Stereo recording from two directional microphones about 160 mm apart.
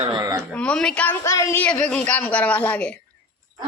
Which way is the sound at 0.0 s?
25° right (ahead or behind).